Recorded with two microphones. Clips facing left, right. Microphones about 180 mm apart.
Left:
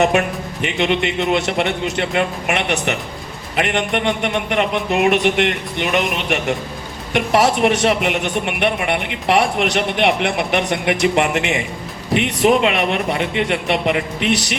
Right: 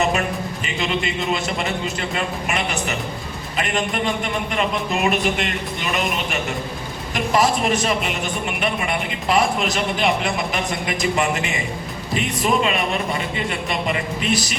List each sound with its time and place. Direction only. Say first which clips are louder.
0.6 s a woman's voice: left 7 dB; 70° left (ahead or behind)